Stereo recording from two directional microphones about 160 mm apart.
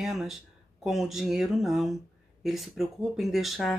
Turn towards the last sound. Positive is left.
turn(degrees=0)  # may be behind; listen again after turning